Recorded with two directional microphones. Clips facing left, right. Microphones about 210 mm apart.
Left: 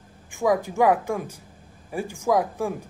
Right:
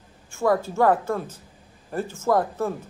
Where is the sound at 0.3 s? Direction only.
15° left (ahead or behind).